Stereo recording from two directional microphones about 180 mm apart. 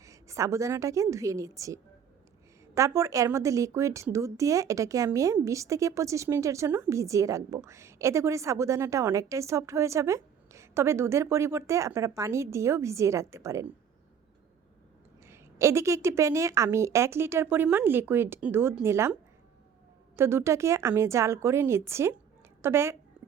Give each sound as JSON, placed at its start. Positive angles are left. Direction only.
{"t": 0.0, "sound": "a woman's voice", "side_deg": -15}
{"t": 15.2, "sound": "a woman's voice", "side_deg": -15}
{"t": 20.1, "sound": "a woman's voice", "side_deg": -15}